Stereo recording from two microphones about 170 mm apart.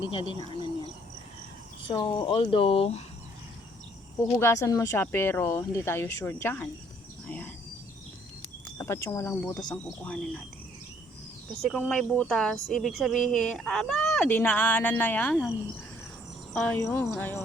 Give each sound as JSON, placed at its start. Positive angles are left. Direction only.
{"t": 0.0, "sound": "speech", "side_deg": 30}
{"t": 1.9, "sound": "speech", "side_deg": 30}
{"t": 4.4, "sound": "speech", "side_deg": 15}
{"t": 8.8, "sound": "speech", "side_deg": 15}
{"t": 12.1, "sound": "speech", "side_deg": 5}